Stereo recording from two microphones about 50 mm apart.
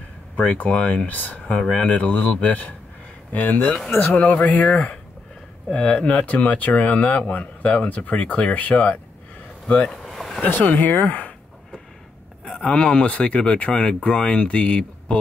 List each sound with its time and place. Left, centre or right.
0.5 s speech: left
1.6 s speech: centre
10.0 s a sound: centre
10.4 s speech: left
12.5 s speech: left